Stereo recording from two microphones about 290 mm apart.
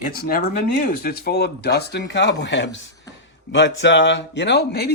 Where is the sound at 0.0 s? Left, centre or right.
Left.